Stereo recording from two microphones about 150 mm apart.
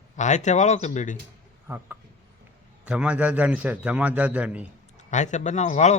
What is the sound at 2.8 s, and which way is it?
A man's voice, 5° right (ahead or behind).